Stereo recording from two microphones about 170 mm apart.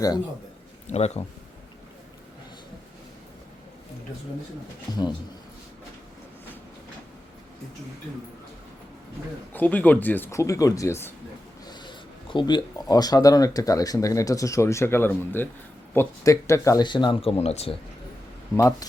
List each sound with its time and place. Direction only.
0.9 s speech: 40° left (ahead or behind)
4.9 s speech: 25° left (ahead or behind)
9.5 s speech: 10° left (ahead or behind)
11.6 s speech: 25° left (ahead or behind)
18.5 s speech: 20° left (ahead or behind)